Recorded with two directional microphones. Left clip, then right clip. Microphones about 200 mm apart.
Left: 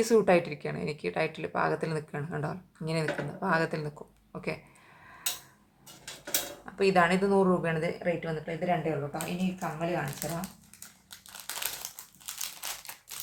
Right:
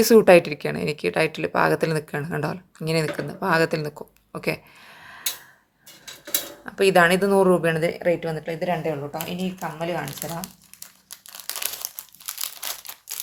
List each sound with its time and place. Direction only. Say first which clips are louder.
0.0 s speech: right 10 dB; 40° right (ahead or behind)
6.7 s speech: right 8 dB; 45° right (ahead or behind)
9.1 s speech: right 5 dB; 40° right (ahead or behind)
11.3 s crumpling: right 5 dB; 35° right (ahead or behind)